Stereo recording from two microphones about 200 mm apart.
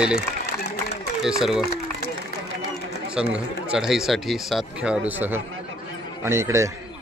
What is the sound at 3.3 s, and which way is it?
Speech, 5° right (ahead or behind).